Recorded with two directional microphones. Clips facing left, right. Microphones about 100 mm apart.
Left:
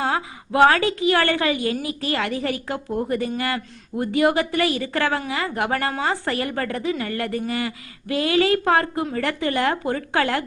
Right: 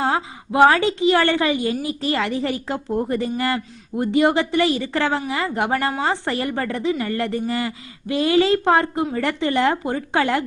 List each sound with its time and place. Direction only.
0.0 s a woman's voice: 20° right (ahead or behind)